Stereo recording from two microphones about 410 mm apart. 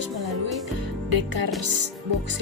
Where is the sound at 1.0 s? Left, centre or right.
Right.